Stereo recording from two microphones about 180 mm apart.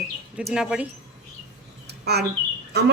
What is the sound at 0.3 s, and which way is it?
Speech, 5° right (ahead or behind).